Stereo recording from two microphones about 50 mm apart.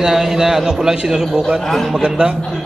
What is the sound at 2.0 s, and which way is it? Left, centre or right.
Speech, centre.